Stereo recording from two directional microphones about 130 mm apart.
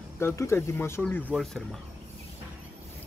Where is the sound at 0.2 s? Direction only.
20° left (ahead or behind); by 1.8 s centre (ahead or behind).